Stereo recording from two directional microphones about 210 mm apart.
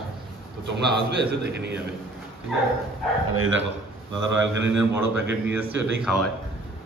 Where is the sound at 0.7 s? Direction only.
55° right (ahead or behind).